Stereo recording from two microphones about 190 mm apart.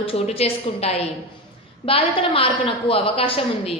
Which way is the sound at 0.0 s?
30° left (ahead or behind).